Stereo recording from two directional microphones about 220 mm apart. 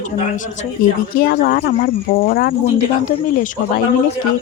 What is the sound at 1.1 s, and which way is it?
Speech, 40° left (ahead or behind).